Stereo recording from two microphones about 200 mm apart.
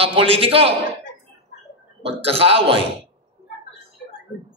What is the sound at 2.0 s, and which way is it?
Speech, 30° right (ahead or behind).